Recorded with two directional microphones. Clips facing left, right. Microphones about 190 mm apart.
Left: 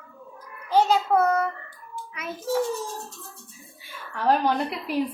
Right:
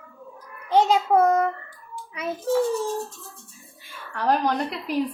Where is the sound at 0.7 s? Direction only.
20° right (ahead or behind).